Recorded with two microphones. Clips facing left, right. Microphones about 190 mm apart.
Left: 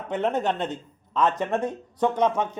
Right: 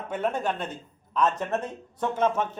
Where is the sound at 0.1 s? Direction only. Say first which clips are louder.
Left 3 dB; 20° left (ahead or behind).